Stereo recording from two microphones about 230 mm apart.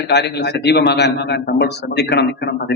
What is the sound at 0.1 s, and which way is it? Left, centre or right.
A man's voice, left.